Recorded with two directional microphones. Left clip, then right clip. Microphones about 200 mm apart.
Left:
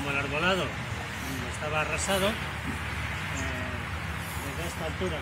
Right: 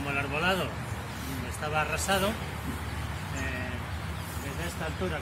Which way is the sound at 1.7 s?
30° left (ahead or behind).